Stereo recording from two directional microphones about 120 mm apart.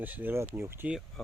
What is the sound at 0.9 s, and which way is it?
Speech, 5° right (ahead or behind).